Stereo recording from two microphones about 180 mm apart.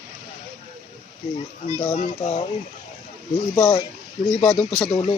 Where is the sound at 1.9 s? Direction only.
40° left (ahead or behind).